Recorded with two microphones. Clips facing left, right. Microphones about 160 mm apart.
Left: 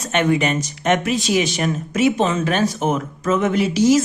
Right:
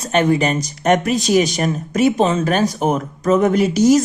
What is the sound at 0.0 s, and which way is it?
A man's voice, 35° right (ahead or behind).